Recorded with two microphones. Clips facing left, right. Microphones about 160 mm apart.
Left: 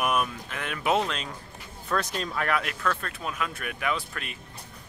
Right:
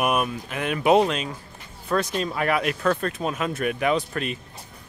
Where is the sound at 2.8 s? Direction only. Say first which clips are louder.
Right 7 dB; 30° right (ahead or behind).